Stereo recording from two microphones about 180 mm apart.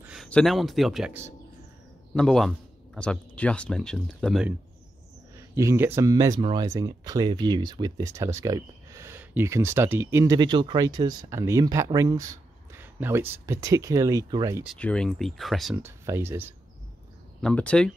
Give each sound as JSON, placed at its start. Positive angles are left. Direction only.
{"t": 0.0, "sound": "speech", "side_deg": 0}
{"t": 2.1, "sound": "speech", "side_deg": 0}
{"t": 5.3, "sound": "speech", "side_deg": -15}
{"t": 14.8, "sound": "speech", "side_deg": 5}
{"t": 15.8, "sound": "speech", "side_deg": -15}
{"t": 17.4, "sound": "speech", "side_deg": 5}